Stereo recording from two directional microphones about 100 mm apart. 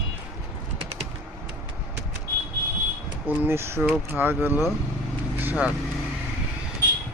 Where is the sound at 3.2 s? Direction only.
20° right (ahead or behind).